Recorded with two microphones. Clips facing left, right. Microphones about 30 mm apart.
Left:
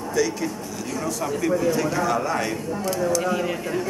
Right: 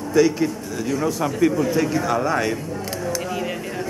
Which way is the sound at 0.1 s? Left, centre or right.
Right.